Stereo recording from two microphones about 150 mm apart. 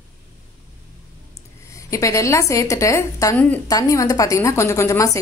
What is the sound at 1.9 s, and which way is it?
A woman's voice, 20° left (ahead or behind).